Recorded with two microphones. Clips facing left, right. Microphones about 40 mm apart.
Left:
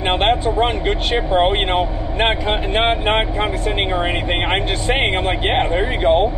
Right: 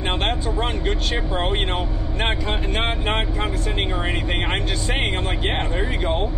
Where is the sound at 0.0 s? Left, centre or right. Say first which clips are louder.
Left 7 dB; left.